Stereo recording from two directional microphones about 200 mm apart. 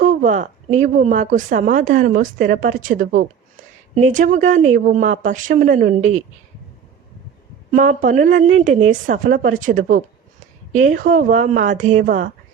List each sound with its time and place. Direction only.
0.0 s speech: 40° right (ahead or behind)
7.7 s speech: 40° right (ahead or behind)